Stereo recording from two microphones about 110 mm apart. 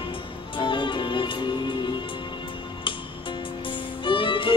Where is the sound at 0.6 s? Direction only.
45° left (ahead or behind).